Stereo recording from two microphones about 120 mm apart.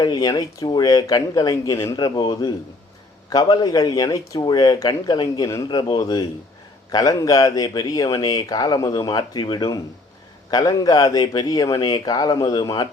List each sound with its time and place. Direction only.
0.0 s speech: 35° left (ahead or behind)